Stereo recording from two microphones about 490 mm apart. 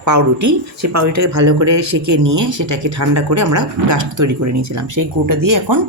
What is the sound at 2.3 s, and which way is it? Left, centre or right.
Speech, right.